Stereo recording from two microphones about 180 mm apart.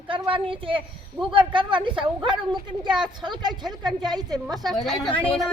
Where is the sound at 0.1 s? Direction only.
30° right (ahead or behind).